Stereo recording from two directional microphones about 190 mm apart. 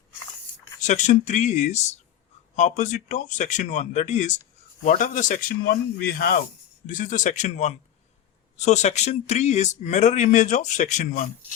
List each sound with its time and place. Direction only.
0.8 s a man's voice: 40° left (ahead or behind)